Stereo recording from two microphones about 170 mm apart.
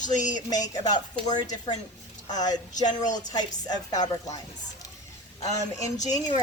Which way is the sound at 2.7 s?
45° left (ahead or behind).